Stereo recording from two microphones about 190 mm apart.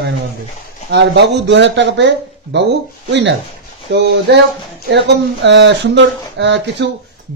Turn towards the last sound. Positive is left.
turn(degrees=-70)  # may be behind; listen again after turning